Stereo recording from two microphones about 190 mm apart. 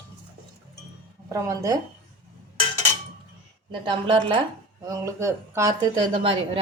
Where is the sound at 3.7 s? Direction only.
25° right (ahead or behind).